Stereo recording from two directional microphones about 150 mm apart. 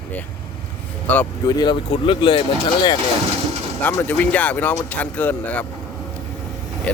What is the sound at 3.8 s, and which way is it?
Speech, 10° left (ahead or behind).